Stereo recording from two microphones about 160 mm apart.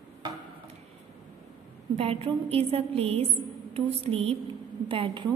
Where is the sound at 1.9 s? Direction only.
40° right (ahead or behind).